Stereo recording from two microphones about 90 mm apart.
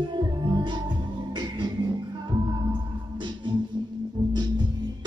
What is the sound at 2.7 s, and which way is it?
Music, 60° right (ahead or behind).